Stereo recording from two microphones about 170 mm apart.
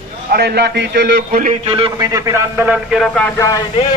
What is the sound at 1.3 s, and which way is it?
Speech, 50° right (ahead or behind).